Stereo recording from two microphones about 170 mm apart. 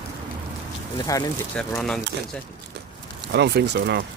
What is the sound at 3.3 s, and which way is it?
Speech, 80° right.